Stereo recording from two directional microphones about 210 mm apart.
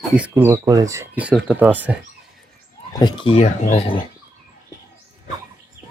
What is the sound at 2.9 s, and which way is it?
Speech, 20° left (ahead or behind).